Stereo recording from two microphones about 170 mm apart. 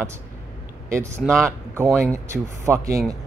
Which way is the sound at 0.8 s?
15° right (ahead or behind).